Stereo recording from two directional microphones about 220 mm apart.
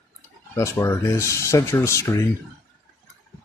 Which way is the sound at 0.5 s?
15° left (ahead or behind).